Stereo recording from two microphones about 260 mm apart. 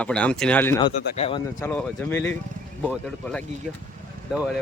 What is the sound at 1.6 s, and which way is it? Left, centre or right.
Speech, centre.